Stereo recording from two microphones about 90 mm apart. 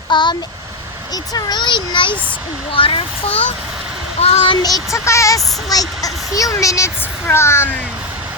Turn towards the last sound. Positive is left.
turn(degrees=25)  # may be behind; listen again after turning